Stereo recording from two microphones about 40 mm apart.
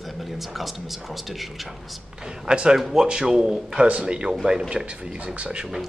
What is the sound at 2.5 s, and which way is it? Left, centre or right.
A man's voice, centre.